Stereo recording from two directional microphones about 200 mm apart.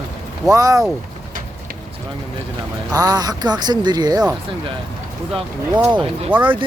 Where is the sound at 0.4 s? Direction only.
15° right (ahead or behind).